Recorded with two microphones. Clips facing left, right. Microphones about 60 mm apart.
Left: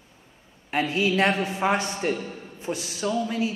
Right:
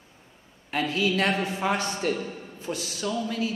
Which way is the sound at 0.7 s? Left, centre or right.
Left.